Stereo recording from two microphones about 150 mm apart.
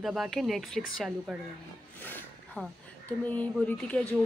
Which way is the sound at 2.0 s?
10° left (ahead or behind).